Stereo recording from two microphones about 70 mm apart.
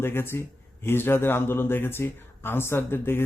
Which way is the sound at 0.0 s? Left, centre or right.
Left.